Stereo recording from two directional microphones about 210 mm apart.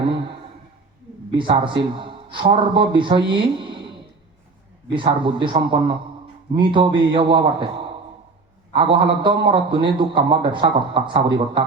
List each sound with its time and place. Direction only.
1.3 s a man's voice: 25° right (ahead or behind)
4.9 s a man's voice: 25° right (ahead or behind)
8.7 s a man's voice: 25° right (ahead or behind)